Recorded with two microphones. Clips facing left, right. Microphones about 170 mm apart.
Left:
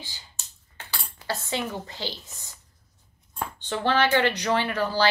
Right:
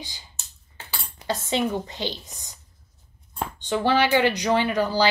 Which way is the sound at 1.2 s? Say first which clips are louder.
Right 5 dB; 20° right (ahead or behind).